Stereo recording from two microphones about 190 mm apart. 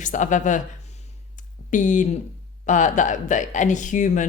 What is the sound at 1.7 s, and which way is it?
Speech, 40° left (ahead or behind).